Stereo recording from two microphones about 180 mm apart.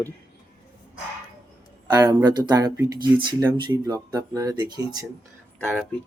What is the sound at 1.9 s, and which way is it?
Speech, 20° right (ahead or behind).